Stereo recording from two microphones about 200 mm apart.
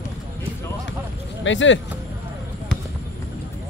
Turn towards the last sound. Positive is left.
turn(degrees=70)  # may be behind; listen again after turning